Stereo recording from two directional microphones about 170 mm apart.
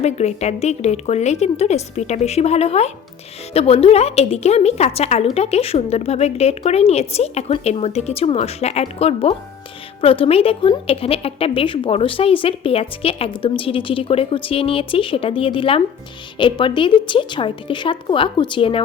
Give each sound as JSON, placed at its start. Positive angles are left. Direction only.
{"t": 0.0, "sound": "a woman's voice", "side_deg": 40}